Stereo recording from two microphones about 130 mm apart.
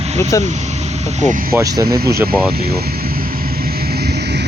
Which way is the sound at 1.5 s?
25° right (ahead or behind).